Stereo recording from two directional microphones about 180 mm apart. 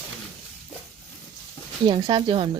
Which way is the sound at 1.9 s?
25° right (ahead or behind).